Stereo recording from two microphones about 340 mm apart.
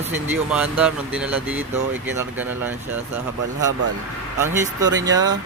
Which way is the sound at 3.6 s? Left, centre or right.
Right.